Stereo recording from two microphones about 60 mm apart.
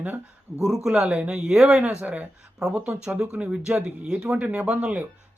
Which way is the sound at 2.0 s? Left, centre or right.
Right.